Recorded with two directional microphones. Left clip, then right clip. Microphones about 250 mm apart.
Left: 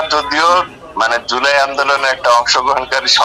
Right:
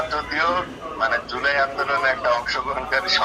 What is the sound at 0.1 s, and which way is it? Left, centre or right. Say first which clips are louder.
A man's voice: left 13 dB; left.